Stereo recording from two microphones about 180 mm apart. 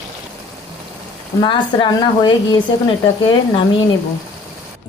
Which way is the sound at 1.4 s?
25° left (ahead or behind).